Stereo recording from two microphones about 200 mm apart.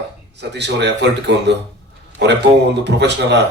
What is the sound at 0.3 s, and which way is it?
A man's voice, 60° right (ahead or behind).